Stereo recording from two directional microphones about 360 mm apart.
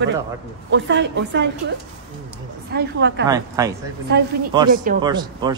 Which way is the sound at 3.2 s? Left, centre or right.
Centre.